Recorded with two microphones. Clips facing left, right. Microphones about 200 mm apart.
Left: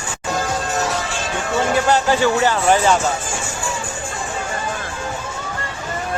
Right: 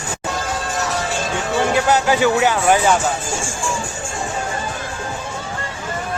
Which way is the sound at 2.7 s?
Centre (ahead or behind).